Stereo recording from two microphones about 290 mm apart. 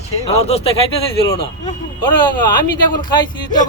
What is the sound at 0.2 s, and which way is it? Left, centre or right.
Speech, left.